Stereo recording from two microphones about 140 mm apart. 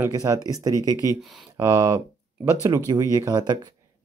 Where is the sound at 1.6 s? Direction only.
25° right (ahead or behind).